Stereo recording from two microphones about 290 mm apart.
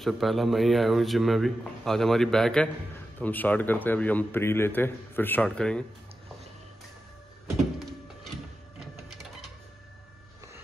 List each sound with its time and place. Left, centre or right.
0.0 s a man's voice: centre
8.7 s printer: centre